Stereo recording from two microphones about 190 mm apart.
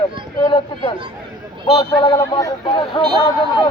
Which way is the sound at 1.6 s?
25° left (ahead or behind).